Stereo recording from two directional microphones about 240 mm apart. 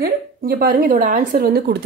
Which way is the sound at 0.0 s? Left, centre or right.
Right.